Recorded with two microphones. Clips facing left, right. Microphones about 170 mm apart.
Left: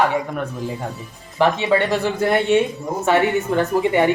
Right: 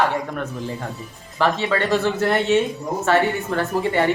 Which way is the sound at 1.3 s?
15° left (ahead or behind).